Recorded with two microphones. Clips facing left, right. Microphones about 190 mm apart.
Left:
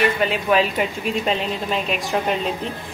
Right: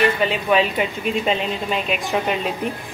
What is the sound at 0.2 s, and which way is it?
Speech, centre (ahead or behind).